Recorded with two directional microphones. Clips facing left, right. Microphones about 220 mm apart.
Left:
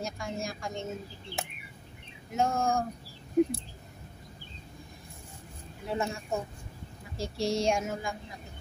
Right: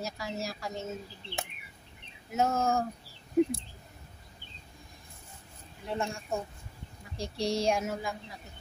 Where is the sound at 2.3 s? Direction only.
5° right (ahead or behind).